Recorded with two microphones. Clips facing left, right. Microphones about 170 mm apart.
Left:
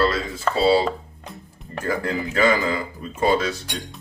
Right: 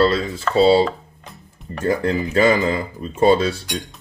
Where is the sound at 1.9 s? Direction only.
25° right (ahead or behind).